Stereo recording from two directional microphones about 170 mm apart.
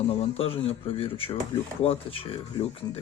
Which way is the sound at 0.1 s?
35° left (ahead or behind).